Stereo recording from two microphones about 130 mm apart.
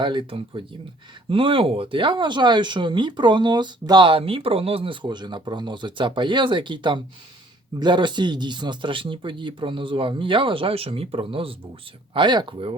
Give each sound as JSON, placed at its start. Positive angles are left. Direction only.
{"t": 0.0, "sound": "speech", "side_deg": -40}